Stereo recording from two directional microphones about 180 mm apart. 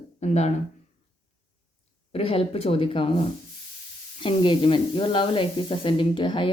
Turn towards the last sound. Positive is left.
turn(degrees=25)  # may be behind; listen again after turning